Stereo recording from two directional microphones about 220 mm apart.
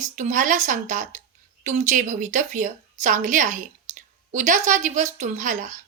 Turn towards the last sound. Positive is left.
turn(degrees=-35)  # may be behind; listen again after turning